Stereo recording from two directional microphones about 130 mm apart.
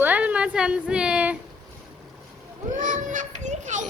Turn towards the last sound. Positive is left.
turn(degrees=-70)  # may be behind; listen again after turning